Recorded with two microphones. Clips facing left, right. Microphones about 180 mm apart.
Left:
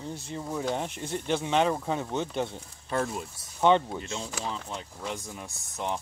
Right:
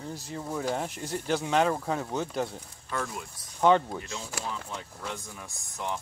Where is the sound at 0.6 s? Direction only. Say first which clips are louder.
Even; 5° right (ahead or behind).